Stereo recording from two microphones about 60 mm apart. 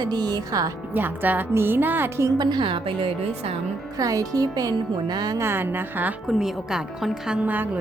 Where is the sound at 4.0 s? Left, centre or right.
Right.